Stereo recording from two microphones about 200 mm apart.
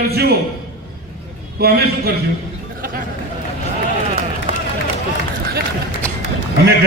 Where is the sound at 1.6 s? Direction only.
50° right (ahead or behind).